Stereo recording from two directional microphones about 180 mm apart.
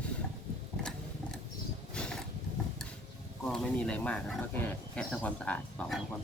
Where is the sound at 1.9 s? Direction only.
5° left (ahead or behind).